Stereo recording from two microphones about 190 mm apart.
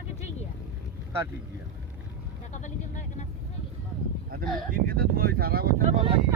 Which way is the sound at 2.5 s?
40° left (ahead or behind).